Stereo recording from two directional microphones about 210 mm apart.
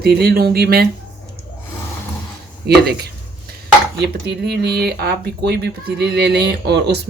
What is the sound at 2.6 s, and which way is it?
Speech, 50° right (ahead or behind).